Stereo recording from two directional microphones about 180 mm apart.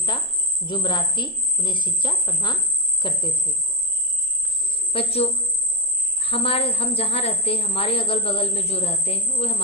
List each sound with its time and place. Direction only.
0.6 s a woman's voice: 25° left (ahead or behind)
4.7 s cricket: 30° left (ahead or behind)
6.1 s a woman's voice: 30° left (ahead or behind)